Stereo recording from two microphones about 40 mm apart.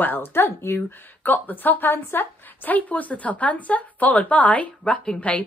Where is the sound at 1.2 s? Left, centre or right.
Left.